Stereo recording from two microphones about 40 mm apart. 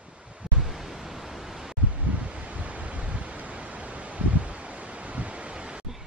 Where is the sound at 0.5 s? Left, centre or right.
Centre.